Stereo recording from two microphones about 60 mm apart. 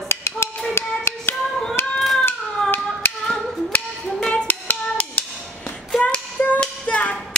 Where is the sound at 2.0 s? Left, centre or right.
Centre.